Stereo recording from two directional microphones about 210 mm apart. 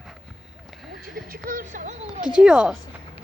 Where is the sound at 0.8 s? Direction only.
Centre (ahead or behind).